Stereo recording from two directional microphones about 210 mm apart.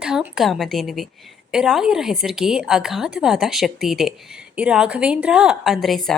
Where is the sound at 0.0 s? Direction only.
5° right (ahead or behind).